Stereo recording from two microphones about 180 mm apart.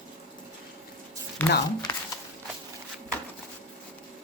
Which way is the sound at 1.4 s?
10° left (ahead or behind).